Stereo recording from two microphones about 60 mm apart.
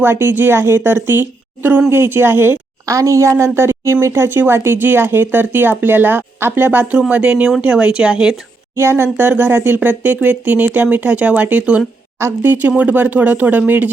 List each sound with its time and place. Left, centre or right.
0.0 s speech: right
2.8 s speech: right
7.1 s speech: centre
8.7 s speech: right
12.2 s speech: right
12.6 s speech: right